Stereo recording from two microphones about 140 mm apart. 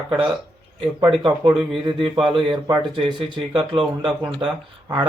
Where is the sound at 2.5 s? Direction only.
35° right (ahead or behind).